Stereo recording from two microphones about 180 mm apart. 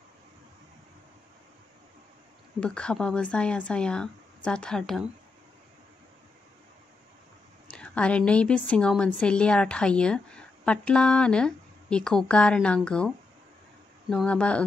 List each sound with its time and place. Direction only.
2.6 s a woman's voice: 5° left (ahead or behind)
7.7 s a woman's voice: 5° left (ahead or behind)